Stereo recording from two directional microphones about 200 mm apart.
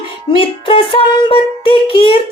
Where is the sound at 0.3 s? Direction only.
25° left (ahead or behind).